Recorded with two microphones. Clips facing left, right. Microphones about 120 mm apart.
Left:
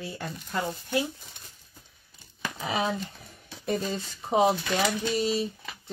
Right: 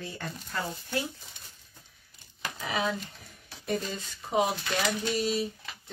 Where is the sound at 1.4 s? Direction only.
55° left (ahead or behind).